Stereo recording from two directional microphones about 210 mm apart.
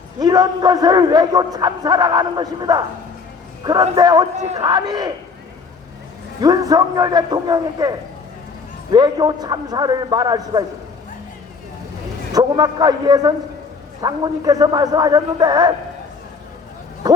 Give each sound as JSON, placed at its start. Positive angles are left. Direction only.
{"t": 0.2, "sound": "a man's voice", "side_deg": -20}
{"t": 6.4, "sound": "a man's voice", "side_deg": -15}
{"t": 12.3, "sound": "a man's voice", "side_deg": -20}
{"t": 17.0, "sound": "a sound", "side_deg": -20}